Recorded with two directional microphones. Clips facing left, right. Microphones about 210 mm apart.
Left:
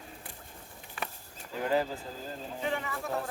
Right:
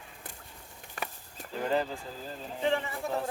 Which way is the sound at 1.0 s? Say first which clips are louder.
Right 1 dB; 45° right (ahead or behind).